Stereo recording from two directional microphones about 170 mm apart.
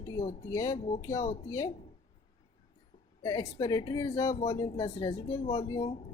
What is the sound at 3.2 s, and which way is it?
Speech, 20° left (ahead or behind).